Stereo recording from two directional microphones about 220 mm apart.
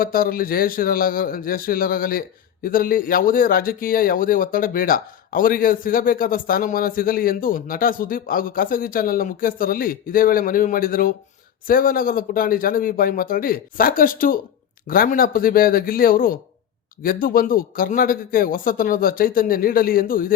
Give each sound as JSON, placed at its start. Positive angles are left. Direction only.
{"t": 0.0, "sound": "speech", "side_deg": 40}